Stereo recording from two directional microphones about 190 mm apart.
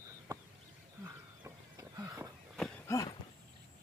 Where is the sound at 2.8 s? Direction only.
15° left (ahead or behind).